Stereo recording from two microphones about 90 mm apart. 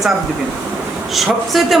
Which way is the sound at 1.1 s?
Centre (ahead or behind).